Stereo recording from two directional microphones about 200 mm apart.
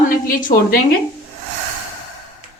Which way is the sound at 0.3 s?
45° left (ahead or behind).